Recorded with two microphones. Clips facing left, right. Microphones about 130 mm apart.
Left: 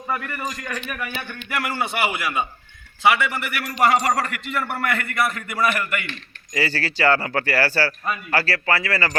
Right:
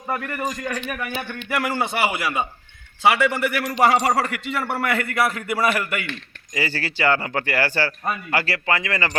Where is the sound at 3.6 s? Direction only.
20° right (ahead or behind).